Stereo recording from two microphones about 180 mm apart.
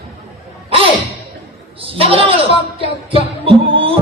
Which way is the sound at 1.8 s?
30° right (ahead or behind).